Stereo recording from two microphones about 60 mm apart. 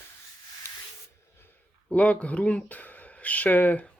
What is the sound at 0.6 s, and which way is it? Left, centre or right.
Spray, left.